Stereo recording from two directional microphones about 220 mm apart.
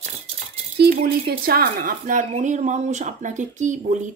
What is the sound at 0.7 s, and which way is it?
Speech, 45° right (ahead or behind).